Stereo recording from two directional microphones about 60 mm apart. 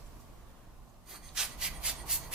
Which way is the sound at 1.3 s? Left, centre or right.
Centre.